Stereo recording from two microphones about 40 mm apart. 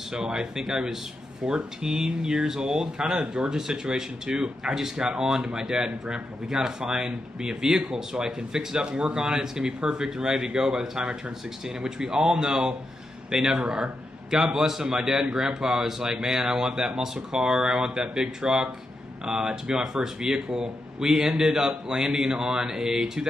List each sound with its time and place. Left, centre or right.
0.1 s speech: centre